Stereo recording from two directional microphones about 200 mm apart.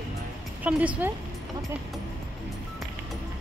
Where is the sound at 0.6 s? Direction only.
5° right (ahead or behind).